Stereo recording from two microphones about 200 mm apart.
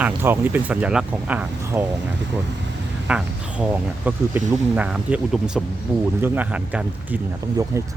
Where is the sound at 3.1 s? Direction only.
5° right (ahead or behind).